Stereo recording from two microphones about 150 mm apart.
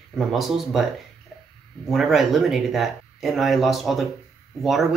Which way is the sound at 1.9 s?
Centre (ahead or behind).